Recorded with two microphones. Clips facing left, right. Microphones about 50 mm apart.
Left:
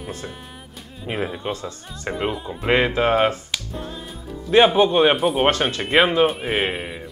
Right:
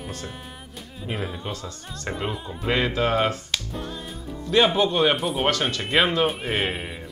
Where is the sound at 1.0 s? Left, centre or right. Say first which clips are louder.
Left 5 dB; centre.